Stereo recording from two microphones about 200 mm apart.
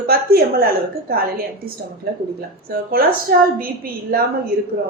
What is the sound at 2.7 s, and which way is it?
Speech, 50° right (ahead or behind).